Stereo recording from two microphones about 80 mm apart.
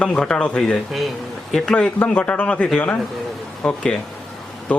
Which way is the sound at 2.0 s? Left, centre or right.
Centre.